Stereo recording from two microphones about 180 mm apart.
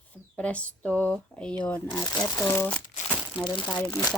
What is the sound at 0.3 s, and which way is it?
Speech, 5° left (ahead or behind).